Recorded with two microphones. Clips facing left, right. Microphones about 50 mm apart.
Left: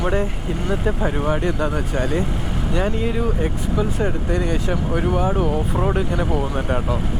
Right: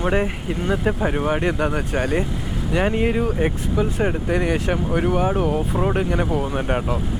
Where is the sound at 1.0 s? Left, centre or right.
Centre.